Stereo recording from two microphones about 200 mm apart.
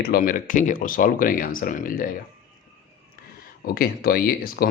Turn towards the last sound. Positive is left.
turn(degrees=50)  # may be behind; listen again after turning